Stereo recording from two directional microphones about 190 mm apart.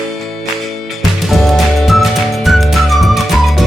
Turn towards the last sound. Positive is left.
turn(degrees=0)  # may be behind; listen again after turning